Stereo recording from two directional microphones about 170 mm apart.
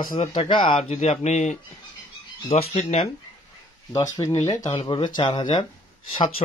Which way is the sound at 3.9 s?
20° left (ahead or behind).